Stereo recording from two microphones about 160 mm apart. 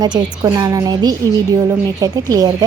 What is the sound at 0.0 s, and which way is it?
A woman's voice, 25° right (ahead or behind).